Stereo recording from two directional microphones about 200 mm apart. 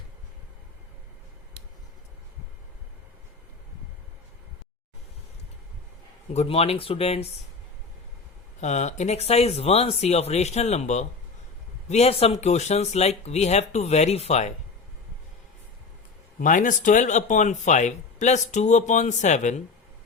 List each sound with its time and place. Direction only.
6.3 s speech: 30° left (ahead or behind)
8.6 s speech: 35° left (ahead or behind)
16.4 s speech: 40° left (ahead or behind)